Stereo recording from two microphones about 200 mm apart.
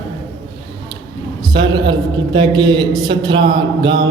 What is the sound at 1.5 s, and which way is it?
A man's voice, 20° right (ahead or behind).